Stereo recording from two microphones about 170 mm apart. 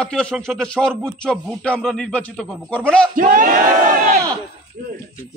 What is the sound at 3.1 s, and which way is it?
Battle cry, 55° right (ahead or behind).